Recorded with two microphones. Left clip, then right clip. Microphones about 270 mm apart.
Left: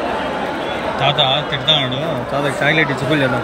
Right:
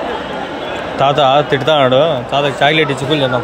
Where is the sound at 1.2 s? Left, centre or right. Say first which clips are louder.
Right 5 dB; centre.